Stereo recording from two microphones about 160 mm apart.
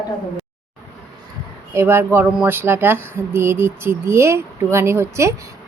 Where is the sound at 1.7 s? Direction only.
15° right (ahead or behind).